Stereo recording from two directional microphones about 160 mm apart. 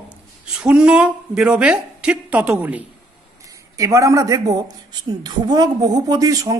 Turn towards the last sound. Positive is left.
turn(degrees=-20)  # may be behind; listen again after turning